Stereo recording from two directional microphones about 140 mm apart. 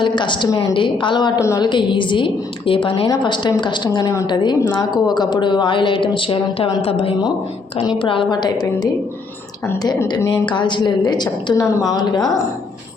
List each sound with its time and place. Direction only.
0.0 s a woman's voice: 35° left (ahead or behind)
1.4 s a woman's voice: 25° left (ahead or behind)
10.2 s a woman's voice: 35° left (ahead or behind)